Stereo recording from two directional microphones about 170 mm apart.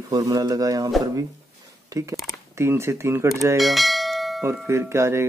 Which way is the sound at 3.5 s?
Centre (ahead or behind).